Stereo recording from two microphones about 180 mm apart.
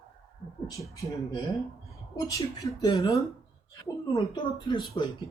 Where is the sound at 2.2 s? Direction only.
20° left (ahead or behind).